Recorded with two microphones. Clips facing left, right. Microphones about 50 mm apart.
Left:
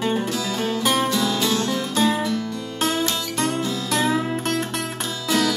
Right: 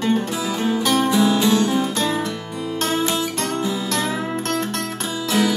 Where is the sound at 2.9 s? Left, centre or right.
Centre.